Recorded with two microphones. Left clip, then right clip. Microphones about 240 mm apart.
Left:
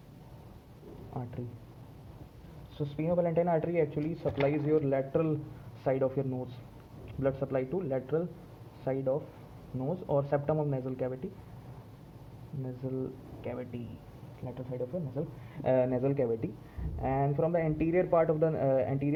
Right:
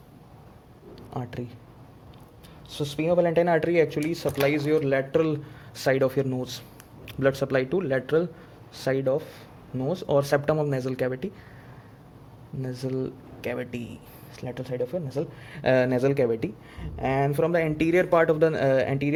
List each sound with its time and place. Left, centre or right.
2.7 s speech: right
12.6 s speech: right